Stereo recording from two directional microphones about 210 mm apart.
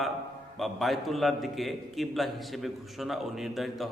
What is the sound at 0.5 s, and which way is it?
A man's voice, centre (ahead or behind).